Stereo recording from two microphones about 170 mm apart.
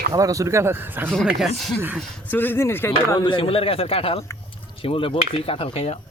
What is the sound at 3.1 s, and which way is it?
Speech, 30° left (ahead or behind).